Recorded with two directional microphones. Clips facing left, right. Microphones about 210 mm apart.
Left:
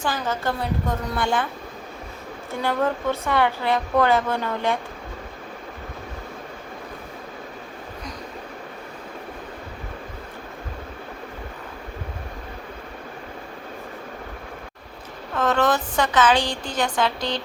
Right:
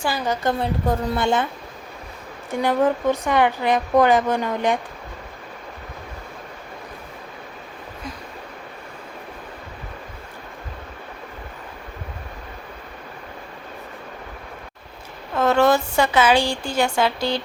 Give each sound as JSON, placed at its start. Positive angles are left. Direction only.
{"t": 0.0, "sound": "a woman's voice", "side_deg": -15}
{"t": 0.9, "sound": "a woman's voice", "side_deg": -25}
{"t": 2.5, "sound": "a woman's voice", "side_deg": -15}
{"t": 15.4, "sound": "a woman's voice", "side_deg": -10}